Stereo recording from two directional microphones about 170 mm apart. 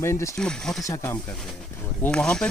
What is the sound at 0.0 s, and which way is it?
Speech, 15° left (ahead or behind).